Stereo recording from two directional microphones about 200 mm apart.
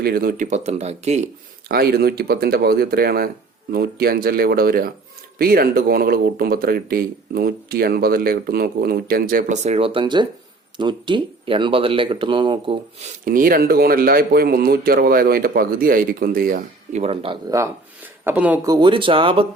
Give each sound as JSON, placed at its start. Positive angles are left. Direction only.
{"t": 0.0, "sound": "speech", "side_deg": -50}
{"t": 1.6, "sound": "speech", "side_deg": -50}
{"t": 9.6, "sound": "speech", "side_deg": -30}
{"t": 13.2, "sound": "speech", "side_deg": -45}
{"t": 18.3, "sound": "speech", "side_deg": -10}
{"t": 18.7, "sound": "speech", "side_deg": -25}